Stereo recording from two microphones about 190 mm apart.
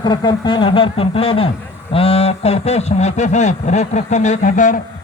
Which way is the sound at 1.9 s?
30° left (ahead or behind).